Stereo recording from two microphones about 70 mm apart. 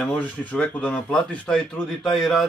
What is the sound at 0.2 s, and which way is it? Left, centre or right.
Speech, left.